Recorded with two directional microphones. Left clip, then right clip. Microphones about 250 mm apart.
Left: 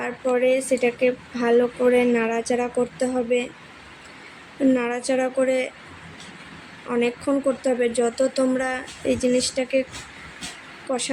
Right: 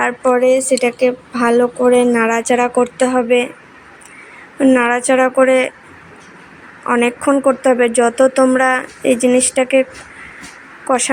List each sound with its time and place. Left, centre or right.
0.0 s a woman's voice: centre
4.7 s a woman's voice: centre
6.8 s a woman's voice: centre
10.9 s a woman's voice: centre